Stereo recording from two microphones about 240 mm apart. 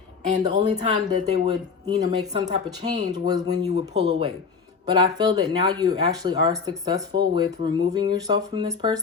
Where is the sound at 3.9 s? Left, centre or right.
Right.